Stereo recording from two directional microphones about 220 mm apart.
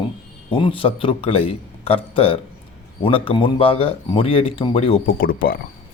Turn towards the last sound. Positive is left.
turn(degrees=40)  # may be behind; listen again after turning